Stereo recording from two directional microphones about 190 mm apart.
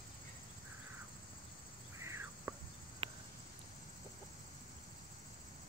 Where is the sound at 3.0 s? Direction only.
30° right (ahead or behind).